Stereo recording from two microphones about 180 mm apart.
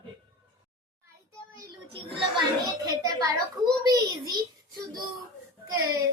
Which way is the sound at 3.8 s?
20° right (ahead or behind).